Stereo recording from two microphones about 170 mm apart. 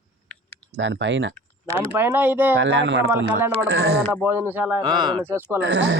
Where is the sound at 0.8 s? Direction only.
90° right.